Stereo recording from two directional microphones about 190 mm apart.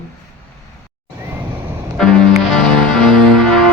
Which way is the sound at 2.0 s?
5° left (ahead or behind).